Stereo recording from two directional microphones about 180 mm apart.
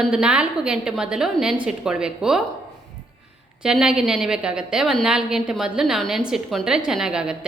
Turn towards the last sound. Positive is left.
turn(degrees=-5)  # may be behind; listen again after turning